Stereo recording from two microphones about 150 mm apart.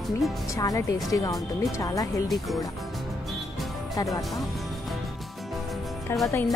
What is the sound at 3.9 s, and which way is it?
Speech, 25° left (ahead or behind).